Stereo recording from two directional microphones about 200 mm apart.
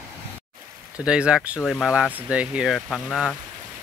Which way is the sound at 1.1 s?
5° right (ahead or behind).